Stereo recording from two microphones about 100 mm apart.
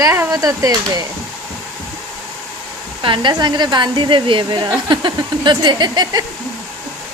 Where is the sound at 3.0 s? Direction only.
55° right (ahead or behind).